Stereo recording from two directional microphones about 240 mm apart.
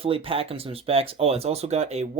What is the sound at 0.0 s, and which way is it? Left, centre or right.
Speech, right.